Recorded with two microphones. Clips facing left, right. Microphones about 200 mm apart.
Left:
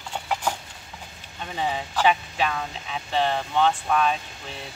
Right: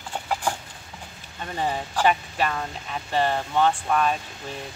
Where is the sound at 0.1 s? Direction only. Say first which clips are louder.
Even; 10° right (ahead or behind).